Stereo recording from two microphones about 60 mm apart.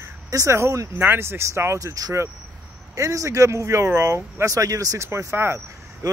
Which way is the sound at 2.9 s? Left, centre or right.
Right.